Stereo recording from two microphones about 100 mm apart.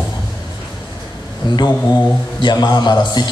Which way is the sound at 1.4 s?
50° left (ahead or behind).